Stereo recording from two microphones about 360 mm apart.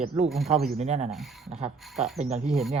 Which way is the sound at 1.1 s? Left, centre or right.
Centre.